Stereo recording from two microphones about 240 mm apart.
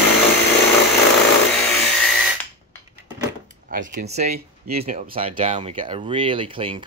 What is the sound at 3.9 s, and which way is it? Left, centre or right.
Speech, right.